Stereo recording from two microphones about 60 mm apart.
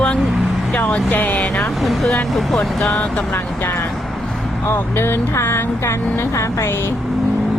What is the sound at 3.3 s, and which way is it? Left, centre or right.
Speech, left.